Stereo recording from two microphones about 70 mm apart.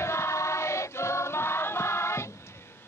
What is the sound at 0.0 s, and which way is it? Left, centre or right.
Choir, left.